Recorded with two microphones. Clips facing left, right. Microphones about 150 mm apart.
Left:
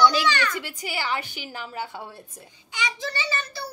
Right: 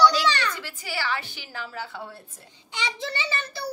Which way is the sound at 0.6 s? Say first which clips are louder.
Left 1 dB; 15° left (ahead or behind).